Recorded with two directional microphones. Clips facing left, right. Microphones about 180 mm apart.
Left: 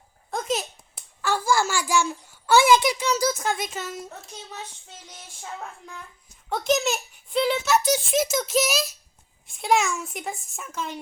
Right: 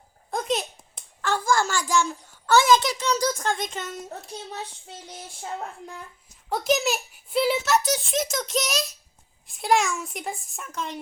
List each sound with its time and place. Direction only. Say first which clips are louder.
0.3 s a sound: right 1 dB; centre (ahead or behind)
4.1 s child singing: right 4 dB; 35° right (ahead or behind)
6.5 s a child's voice: even; centre (ahead or behind)